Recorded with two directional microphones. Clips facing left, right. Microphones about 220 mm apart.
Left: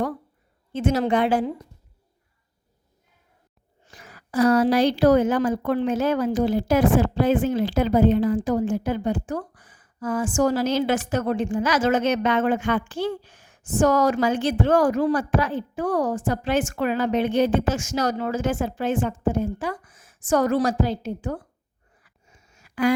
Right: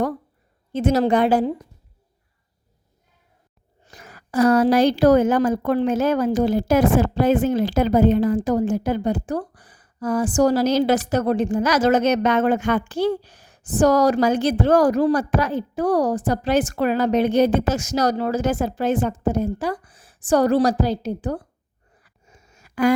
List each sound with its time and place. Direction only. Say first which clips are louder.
0.7 s a woman's voice: right 3 dB; 40° right (ahead or behind)
3.8 s a woman's voice: right 3 dB; 40° right (ahead or behind)
22.0 s a sound: right 5 dB; 40° right (ahead or behind)